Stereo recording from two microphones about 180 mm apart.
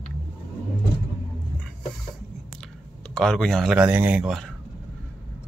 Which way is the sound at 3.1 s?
5° left (ahead or behind).